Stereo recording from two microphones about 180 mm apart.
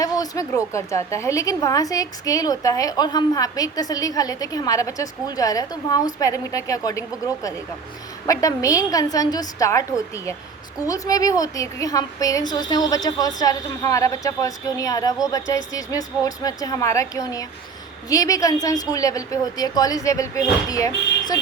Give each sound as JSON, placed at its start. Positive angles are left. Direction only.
{"t": 0.0, "sound": "a woman's voice", "side_deg": 20}
{"t": 8.3, "sound": "a woman's voice", "side_deg": 20}